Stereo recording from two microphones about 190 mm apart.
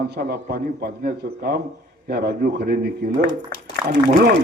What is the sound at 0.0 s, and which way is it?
A man's voice, 55° right (ahead or behind).